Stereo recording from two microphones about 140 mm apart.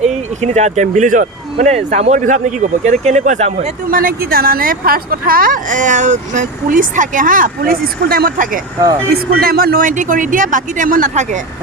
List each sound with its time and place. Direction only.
0.0 s speech: 55° right (ahead or behind)
1.5 s speech: 55° right (ahead or behind)
3.8 s speech: 90° right; by 11.3 s 60° right (ahead or behind)